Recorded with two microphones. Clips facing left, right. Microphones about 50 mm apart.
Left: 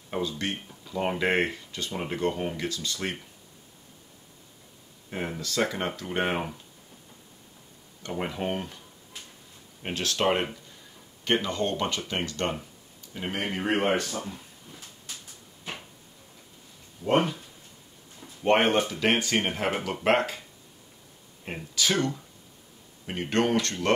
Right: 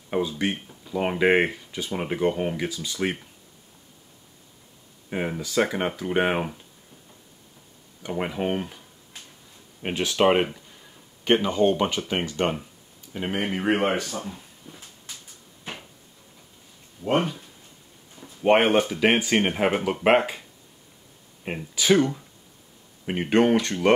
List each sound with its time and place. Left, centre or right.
0.1 s speech: centre
5.1 s speech: centre
8.0 s speech: centre
9.8 s speech: centre
17.0 s speech: centre
18.4 s speech: centre
21.7 s speech: centre